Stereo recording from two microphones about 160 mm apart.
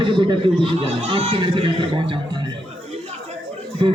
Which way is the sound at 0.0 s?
30° right (ahead or behind).